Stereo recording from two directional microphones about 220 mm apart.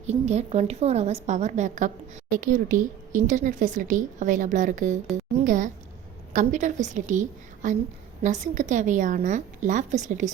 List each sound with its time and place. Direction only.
0.0 s speech: 30° right (ahead or behind)